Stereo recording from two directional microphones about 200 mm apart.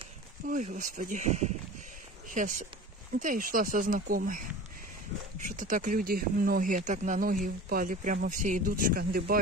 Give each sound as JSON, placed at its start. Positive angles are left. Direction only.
{"t": 0.5, "sound": "speech", "side_deg": -40}
{"t": 5.5, "sound": "speech", "side_deg": -40}